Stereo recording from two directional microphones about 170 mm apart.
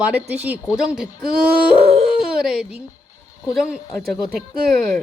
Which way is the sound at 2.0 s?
5° right (ahead or behind).